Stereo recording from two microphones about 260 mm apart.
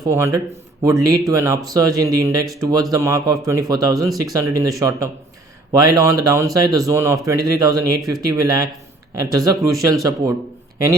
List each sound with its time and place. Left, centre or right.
0.0 s speech: centre